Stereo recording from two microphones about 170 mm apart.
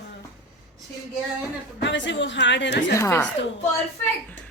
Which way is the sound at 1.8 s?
90° left.